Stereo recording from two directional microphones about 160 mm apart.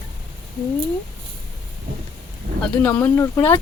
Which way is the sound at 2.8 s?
10° left (ahead or behind).